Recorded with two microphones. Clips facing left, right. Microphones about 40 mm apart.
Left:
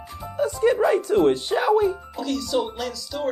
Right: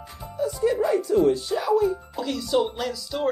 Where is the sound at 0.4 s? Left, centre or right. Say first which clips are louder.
Left 3 dB; left.